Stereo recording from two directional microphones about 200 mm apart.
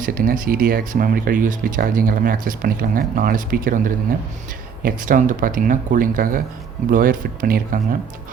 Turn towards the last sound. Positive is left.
turn(degrees=-45)  # may be behind; listen again after turning